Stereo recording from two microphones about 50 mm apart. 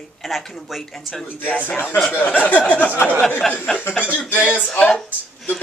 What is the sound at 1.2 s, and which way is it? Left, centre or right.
Speech, left.